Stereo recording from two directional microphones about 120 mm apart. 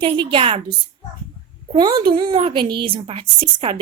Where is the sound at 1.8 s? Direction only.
35° right (ahead or behind).